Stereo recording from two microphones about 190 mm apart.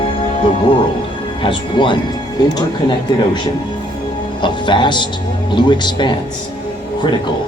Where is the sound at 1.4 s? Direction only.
25° left (ahead or behind).